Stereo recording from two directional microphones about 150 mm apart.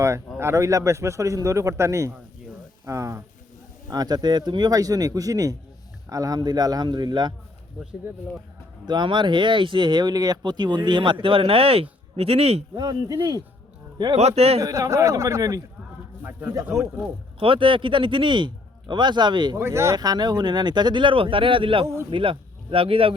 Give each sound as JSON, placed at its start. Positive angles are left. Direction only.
{"t": 0.3, "sound": "speech", "side_deg": -20}
{"t": 8.9, "sound": "speech", "side_deg": -30}
{"t": 12.7, "sound": "speech", "side_deg": -25}
{"t": 14.2, "sound": "a man's voice", "side_deg": -45}
{"t": 14.6, "sound": "speech", "side_deg": -20}
{"t": 17.4, "sound": "speech", "side_deg": -35}
{"t": 19.6, "sound": "speech", "side_deg": -15}